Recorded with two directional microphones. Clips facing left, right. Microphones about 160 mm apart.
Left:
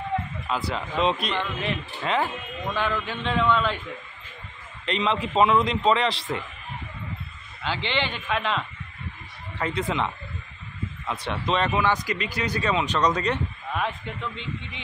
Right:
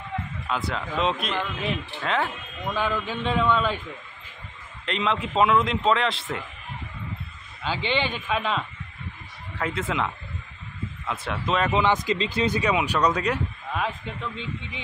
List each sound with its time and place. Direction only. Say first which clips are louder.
0.5 s a man's voice: even; centre (ahead or behind)
2.7 s a man's voice: right 1 dB; 10° right (ahead or behind)
4.8 s a man's voice: left 1 dB; centre (ahead or behind)
7.6 s a man's voice: right 1 dB; 10° right (ahead or behind)
11.7 s a man's voice: right 2 dB; 20° right (ahead or behind)